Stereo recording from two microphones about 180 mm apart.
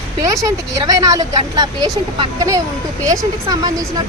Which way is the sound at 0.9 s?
20° right (ahead or behind).